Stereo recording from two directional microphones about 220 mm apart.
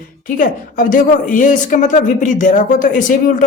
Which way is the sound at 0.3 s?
40° left (ahead or behind).